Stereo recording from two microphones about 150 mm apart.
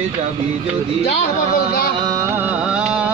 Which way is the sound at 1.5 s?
80° left.